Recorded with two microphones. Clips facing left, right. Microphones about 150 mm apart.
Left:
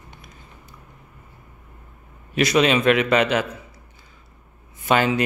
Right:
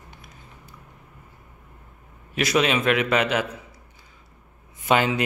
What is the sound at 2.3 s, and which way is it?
Speech, 5° right (ahead or behind).